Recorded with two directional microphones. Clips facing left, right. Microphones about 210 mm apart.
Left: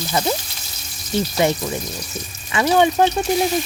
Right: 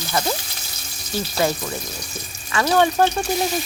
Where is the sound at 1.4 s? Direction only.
20° left (ahead or behind).